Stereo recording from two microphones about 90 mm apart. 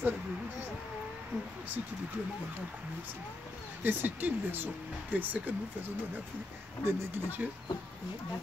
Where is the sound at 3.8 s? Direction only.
20° right (ahead or behind).